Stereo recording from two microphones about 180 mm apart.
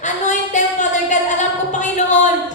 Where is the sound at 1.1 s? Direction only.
45° left (ahead or behind).